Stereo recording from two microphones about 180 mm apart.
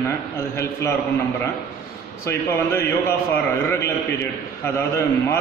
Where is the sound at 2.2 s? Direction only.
15° left (ahead or behind).